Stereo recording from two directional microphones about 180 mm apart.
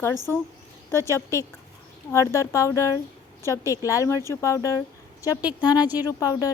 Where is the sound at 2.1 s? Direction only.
15° left (ahead or behind).